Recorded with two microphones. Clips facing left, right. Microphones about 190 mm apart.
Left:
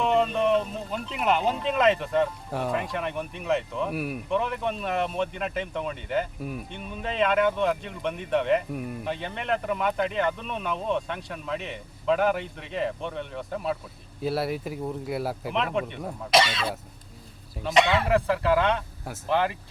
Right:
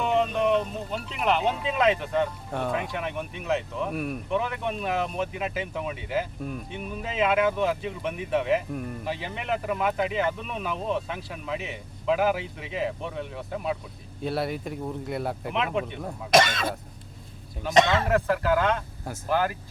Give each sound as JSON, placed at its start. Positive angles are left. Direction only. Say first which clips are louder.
{"t": 0.0, "sound": "speech", "louder": "left 1 dB", "side_deg": 0}
{"t": 16.3, "sound": "speech", "louder": "right 2 dB", "side_deg": -50}
{"t": 18.1, "sound": "speech", "louder": "left 1 dB", "side_deg": 0}